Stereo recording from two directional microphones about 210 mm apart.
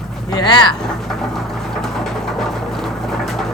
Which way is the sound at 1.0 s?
Centre (ahead or behind).